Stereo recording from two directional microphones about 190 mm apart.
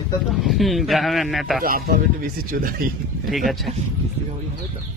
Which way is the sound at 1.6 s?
50° right (ahead or behind).